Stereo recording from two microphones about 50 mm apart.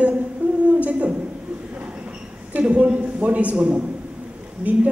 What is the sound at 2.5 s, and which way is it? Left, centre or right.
A woman's voice, right.